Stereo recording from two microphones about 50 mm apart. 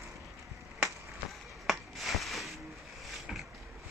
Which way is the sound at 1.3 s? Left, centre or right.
Centre.